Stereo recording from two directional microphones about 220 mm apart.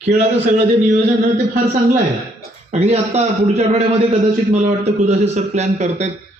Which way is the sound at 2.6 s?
30° right (ahead or behind).